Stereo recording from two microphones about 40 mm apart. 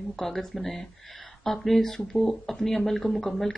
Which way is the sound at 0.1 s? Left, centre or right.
Centre.